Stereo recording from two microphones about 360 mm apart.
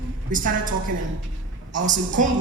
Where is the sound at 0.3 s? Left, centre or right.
Right.